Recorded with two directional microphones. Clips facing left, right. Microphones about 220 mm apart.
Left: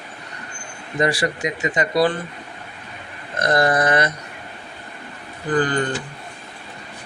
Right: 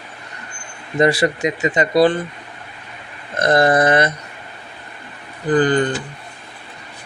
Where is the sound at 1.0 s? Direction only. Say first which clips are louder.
Right 5 dB; 25° right (ahead or behind).